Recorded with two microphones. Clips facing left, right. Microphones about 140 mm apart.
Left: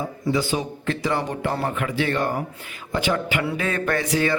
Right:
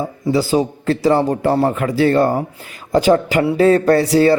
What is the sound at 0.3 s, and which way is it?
A man's voice, 35° right (ahead or behind).